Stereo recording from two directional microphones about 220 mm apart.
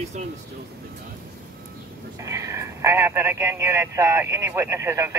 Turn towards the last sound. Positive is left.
turn(degrees=-15)  # may be behind; listen again after turning